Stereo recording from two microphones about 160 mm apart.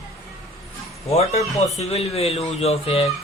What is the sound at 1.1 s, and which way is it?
Speech, 40° left (ahead or behind).